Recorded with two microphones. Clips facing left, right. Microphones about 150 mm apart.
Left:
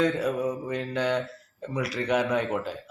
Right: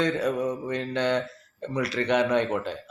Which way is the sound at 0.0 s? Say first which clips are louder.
Even; 5° left (ahead or behind).